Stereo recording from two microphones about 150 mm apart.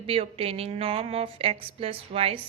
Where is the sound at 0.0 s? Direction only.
40° right (ahead or behind).